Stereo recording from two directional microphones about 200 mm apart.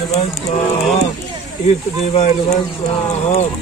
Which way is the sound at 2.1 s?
35° left (ahead or behind).